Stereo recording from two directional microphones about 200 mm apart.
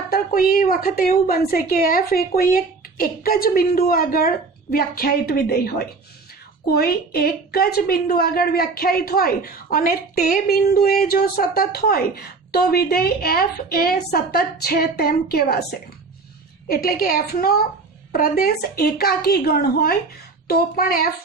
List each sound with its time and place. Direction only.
0.1 s a woman's voice: 45° left (ahead or behind)
16.6 s a woman's voice: 50° left (ahead or behind)